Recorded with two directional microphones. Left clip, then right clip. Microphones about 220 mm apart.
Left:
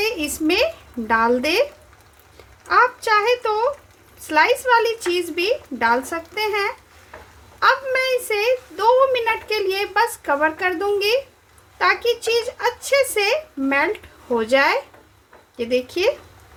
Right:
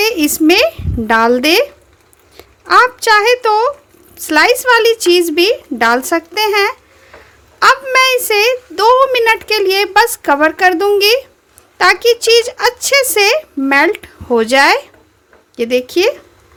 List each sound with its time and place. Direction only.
0.0 s speech: 45° right (ahead or behind)
2.6 s a woman's voice: 50° right (ahead or behind)